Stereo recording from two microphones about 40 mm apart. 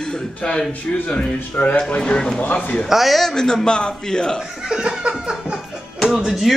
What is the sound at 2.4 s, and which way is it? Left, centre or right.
Speech, left.